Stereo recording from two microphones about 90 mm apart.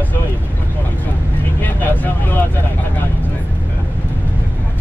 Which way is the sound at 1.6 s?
20° left (ahead or behind).